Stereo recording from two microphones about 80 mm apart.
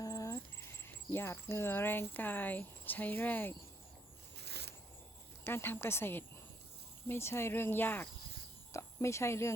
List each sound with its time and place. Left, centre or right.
0.0 s a sound: left
0.3 s speech: left
5.5 s speech: left
8.7 s speech: left